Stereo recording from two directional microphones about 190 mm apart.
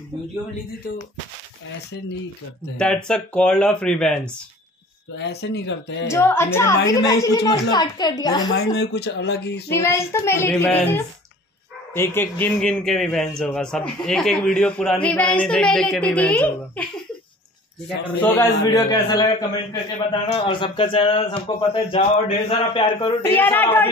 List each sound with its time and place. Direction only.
2.8 s a man's voice: 5° left (ahead or behind)
5.1 s speech: 60° left (ahead or behind)
6.0 s child singing: 15° left (ahead or behind)
6.9 s a man's voice: 20° left (ahead or behind)
8.7 s speech: 60° left (ahead or behind)
9.7 s child singing: 15° left (ahead or behind)
11.9 s a man's voice: 10° left (ahead or behind)
18.2 s a man's voice: 10° left (ahead or behind)
23.2 s child singing: 10° left (ahead or behind)